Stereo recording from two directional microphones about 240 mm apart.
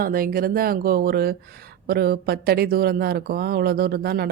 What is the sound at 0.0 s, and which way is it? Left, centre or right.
Speech, right.